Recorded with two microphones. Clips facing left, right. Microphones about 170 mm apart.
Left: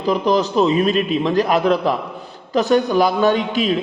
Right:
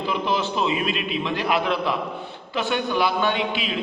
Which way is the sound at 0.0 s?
40° left (ahead or behind).